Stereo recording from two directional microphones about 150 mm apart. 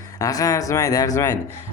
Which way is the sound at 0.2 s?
25° left (ahead or behind).